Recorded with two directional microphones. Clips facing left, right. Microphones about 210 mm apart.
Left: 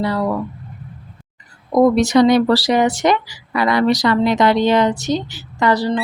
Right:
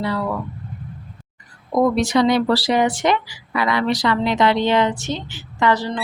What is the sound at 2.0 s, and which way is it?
Speech, 45° left (ahead or behind).